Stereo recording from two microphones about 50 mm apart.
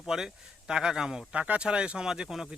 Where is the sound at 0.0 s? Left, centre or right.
Centre.